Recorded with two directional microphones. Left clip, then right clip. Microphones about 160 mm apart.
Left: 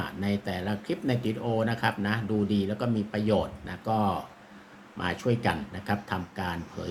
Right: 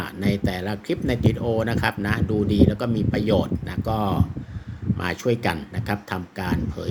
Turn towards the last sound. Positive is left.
turn(degrees=-45)  # may be behind; listen again after turning